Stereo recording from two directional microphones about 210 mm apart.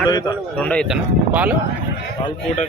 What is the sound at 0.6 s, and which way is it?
Speech, 5° left (ahead or behind).